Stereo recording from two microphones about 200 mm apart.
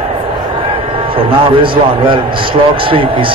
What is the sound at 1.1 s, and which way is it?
Speech, 25° right (ahead or behind).